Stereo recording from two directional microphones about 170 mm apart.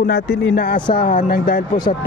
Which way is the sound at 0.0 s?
70° left (ahead or behind).